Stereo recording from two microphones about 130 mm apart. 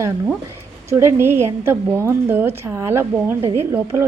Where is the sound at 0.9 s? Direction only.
20° right (ahead or behind).